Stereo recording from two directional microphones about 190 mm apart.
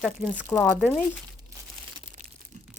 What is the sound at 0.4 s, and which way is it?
Speech, 15° left (ahead or behind).